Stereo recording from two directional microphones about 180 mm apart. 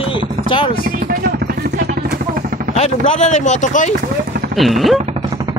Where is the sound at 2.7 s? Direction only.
35° left (ahead or behind).